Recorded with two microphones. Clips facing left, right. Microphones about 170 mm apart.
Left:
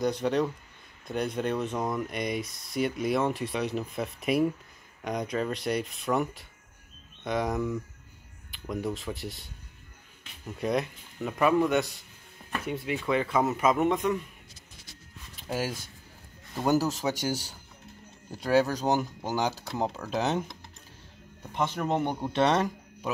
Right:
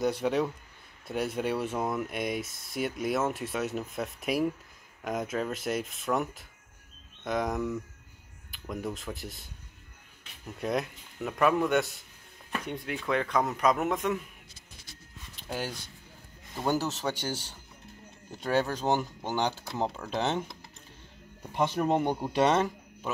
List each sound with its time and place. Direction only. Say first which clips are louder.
0.0 s speech: left 1 dB; 5° right (ahead or behind)
15.4 s speech: left 4 dB; 5° left (ahead or behind)
18.3 s speech: left 4 dB; 5° left (ahead or behind)
21.4 s speech: right 2 dB; 10° right (ahead or behind)